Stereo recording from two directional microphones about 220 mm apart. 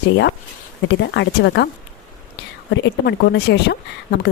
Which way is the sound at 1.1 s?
50° left (ahead or behind).